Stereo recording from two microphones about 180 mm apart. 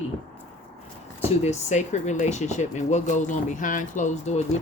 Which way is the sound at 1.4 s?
40° left (ahead or behind).